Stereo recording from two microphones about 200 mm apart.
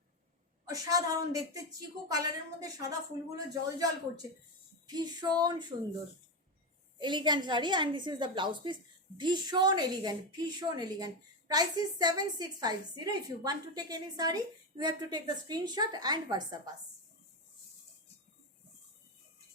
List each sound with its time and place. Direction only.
0.6 s a woman's voice: 20° right (ahead or behind)
7.0 s a woman's voice: 20° right (ahead or behind)